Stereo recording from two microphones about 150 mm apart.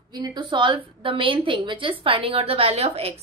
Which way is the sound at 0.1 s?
30° right (ahead or behind).